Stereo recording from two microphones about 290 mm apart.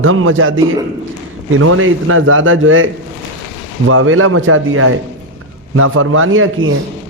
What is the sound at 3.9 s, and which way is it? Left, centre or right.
A man's voice, right.